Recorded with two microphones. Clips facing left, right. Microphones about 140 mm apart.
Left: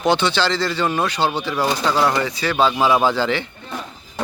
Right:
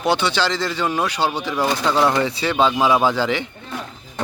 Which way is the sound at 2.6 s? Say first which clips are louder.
Even; 15° right (ahead or behind).